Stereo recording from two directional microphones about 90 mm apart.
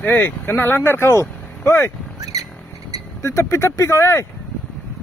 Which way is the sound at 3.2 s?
30° left (ahead or behind).